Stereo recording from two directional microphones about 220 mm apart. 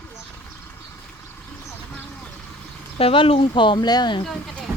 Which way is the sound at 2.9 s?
25° left (ahead or behind).